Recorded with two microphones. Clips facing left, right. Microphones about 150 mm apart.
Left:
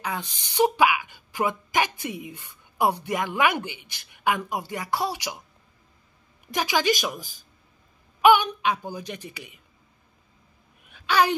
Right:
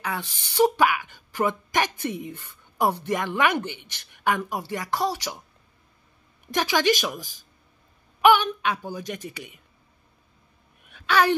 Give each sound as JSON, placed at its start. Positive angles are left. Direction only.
{"t": 0.0, "sound": "speech", "side_deg": 15}
{"t": 6.5, "sound": "speech", "side_deg": 10}
{"t": 9.2, "sound": "speech", "side_deg": -45}
{"t": 11.1, "sound": "speech", "side_deg": 15}